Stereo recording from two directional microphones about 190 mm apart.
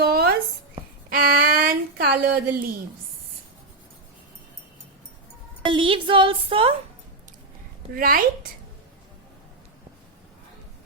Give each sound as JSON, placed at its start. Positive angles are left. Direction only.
{"t": 0.0, "sound": "a sound", "side_deg": -55}
{"t": 5.6, "sound": "a woman's voice", "side_deg": -25}
{"t": 7.9, "sound": "a woman's voice", "side_deg": -45}